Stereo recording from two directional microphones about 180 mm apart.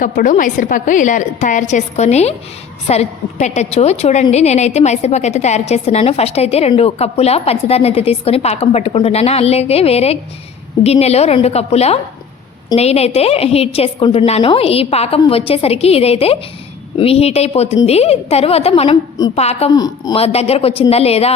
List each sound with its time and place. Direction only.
0.0 s a woman's voice: 50° left (ahead or behind)
19.7 s speech: 20° left (ahead or behind)
20.1 s a woman's voice: 35° left (ahead or behind)